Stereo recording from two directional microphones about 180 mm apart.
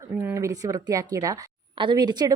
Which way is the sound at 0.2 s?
15° right (ahead or behind).